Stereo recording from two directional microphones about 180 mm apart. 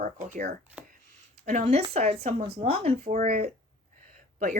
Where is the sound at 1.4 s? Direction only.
40° right (ahead or behind).